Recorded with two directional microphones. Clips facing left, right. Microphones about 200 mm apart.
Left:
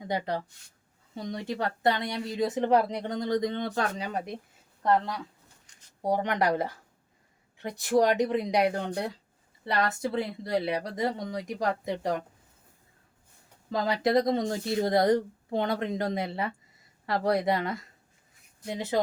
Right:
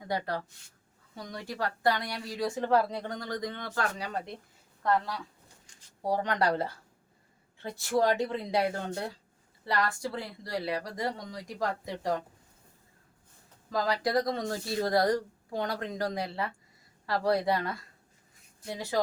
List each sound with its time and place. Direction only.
0.0 s speech: 20° left (ahead or behind)
13.7 s speech: 25° left (ahead or behind)